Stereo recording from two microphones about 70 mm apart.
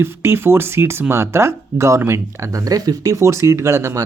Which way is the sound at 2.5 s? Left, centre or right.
Right.